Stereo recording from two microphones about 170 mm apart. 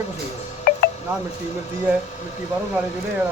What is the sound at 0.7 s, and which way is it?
Wind chime, 60° left (ahead or behind).